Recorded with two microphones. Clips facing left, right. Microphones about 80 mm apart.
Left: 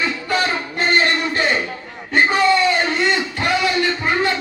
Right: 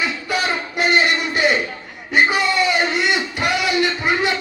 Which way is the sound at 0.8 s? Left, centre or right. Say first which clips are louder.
Even; centre.